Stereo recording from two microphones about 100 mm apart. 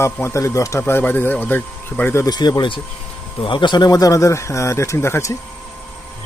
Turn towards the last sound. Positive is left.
turn(degrees=30)  # may be behind; listen again after turning